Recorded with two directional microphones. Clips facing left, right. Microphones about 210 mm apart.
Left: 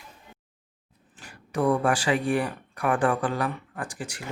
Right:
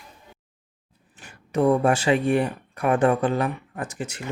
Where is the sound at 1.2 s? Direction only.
25° right (ahead or behind).